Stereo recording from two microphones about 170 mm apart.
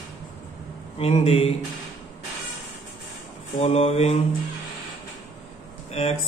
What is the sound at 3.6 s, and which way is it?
Speech, 40° left (ahead or behind).